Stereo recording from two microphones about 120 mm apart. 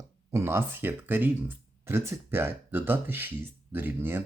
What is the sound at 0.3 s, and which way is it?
Speech, 20° right (ahead or behind).